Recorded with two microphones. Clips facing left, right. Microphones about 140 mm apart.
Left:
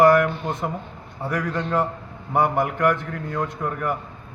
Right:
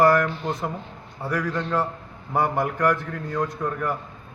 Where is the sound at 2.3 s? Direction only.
15° left (ahead or behind).